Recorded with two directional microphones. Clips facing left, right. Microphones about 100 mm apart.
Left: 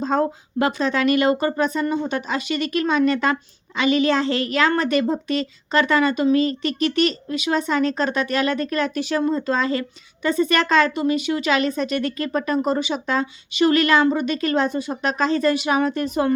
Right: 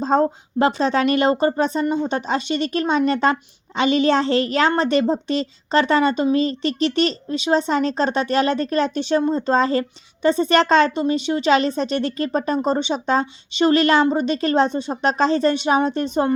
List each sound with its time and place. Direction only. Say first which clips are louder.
0.0 s speech: right 3 dB; 30° right (ahead or behind)